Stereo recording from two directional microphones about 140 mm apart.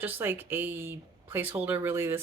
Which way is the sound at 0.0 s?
15° right (ahead or behind).